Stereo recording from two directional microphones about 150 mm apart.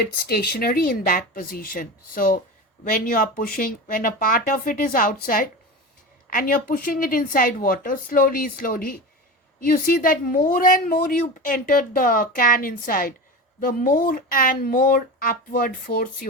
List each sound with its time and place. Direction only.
0.0 s speech: 90° left; by 16.0 s 65° left (ahead or behind)